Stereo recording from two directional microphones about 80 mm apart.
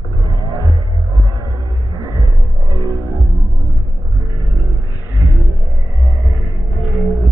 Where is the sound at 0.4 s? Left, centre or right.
Left.